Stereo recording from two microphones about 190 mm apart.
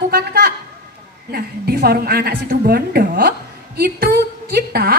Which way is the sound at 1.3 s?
55° right (ahead or behind).